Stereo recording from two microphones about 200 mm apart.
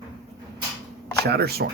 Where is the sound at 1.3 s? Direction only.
55° right (ahead or behind).